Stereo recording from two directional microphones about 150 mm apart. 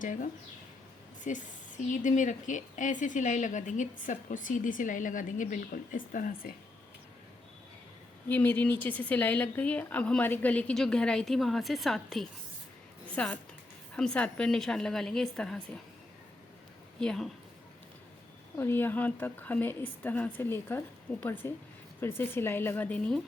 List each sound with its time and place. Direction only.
0.0 s a woman's voice: 60° left (ahead or behind)
1.3 s a woman's voice: 55° left (ahead or behind)
8.3 s a woman's voice: 15° left (ahead or behind)
17.0 s a woman's voice: 5° left (ahead or behind)
18.5 s a woman's voice: 15° left (ahead or behind)